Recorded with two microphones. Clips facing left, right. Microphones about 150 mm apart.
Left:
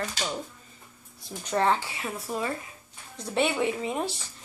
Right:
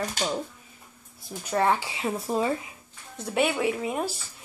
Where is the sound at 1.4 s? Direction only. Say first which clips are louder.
Right 1 dB; 10° right (ahead or behind); by 2.5 s 25° right (ahead or behind).